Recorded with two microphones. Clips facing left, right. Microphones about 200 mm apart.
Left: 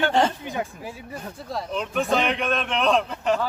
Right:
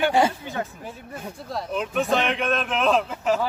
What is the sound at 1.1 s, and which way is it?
A man's voice, centre (ahead or behind).